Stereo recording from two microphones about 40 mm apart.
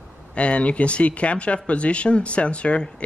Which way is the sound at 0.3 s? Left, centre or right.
Left.